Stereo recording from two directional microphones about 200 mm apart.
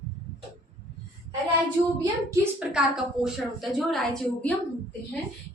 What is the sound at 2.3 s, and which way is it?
A woman's voice, 5° right (ahead or behind).